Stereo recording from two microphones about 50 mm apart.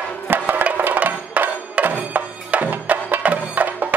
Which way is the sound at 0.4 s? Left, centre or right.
Right.